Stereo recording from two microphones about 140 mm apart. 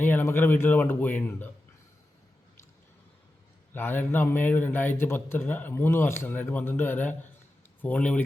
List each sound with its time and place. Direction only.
0.0 s a man's voice: 15° left (ahead or behind)
3.8 s a man's voice: 15° left (ahead or behind)